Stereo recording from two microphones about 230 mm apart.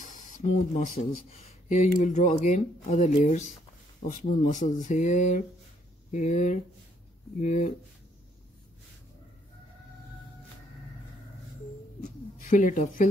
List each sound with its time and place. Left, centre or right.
0.0 s speech: left
12.4 s speech: left